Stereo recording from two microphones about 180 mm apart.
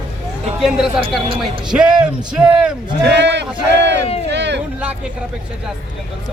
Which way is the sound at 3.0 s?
75° right (ahead or behind).